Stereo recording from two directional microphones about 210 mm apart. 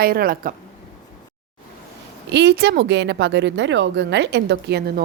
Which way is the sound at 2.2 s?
55° right (ahead or behind).